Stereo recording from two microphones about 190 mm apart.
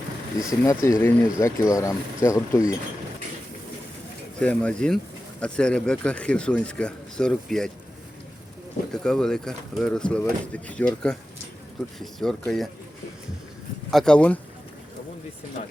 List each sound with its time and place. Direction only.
0.6 s speech: 15° left (ahead or behind)
4.4 s speech: 5° left (ahead or behind)
8.9 s speech: 5° left (ahead or behind)
13.9 s speech: 5° left (ahead or behind)
15.6 s speech: 35° left (ahead or behind)